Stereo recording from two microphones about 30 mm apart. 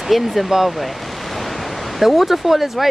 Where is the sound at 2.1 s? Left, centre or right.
Centre.